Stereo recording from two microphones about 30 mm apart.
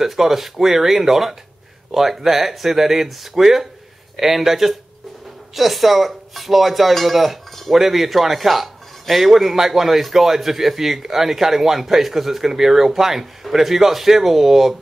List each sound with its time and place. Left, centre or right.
0.0 s speech: centre